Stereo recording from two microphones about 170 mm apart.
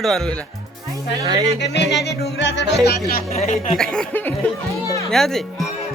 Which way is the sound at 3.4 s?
45° left (ahead or behind).